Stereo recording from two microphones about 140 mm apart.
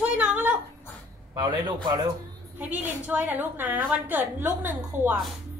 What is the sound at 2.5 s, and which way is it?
A child's voice, 10° right (ahead or behind).